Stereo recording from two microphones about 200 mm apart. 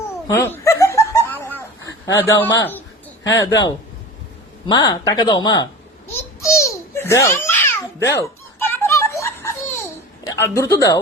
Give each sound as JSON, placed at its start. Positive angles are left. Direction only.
{"t": 0.3, "sound": "snicker", "side_deg": 15}
{"t": 2.1, "sound": "speech", "side_deg": 15}
{"t": 4.7, "sound": "speech", "side_deg": 20}
{"t": 6.1, "sound": "babbling", "side_deg": 15}
{"t": 10.2, "sound": "speech", "side_deg": 15}